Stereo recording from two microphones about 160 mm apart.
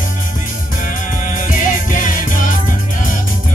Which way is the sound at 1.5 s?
55° left (ahead or behind).